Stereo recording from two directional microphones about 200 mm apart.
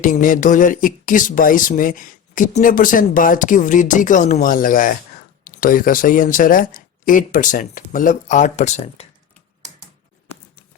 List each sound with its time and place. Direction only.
0.0 s speech: 40° left (ahead or behind)